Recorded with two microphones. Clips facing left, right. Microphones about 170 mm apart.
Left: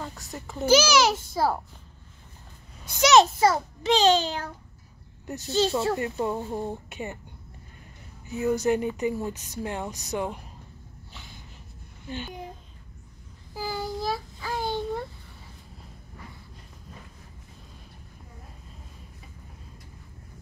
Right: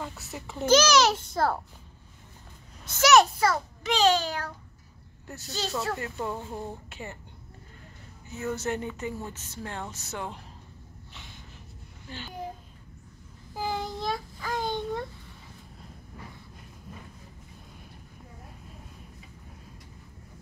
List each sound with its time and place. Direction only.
0.3 s child singing: centre (ahead or behind)
2.9 s speech: 20° left (ahead or behind)
8.4 s speech: 15° left (ahead or behind)
12.1 s speech: 20° left (ahead or behind)
13.6 s child singing: 5° left (ahead or behind)